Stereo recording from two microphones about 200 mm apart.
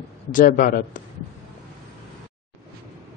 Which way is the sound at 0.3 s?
40° left (ahead or behind).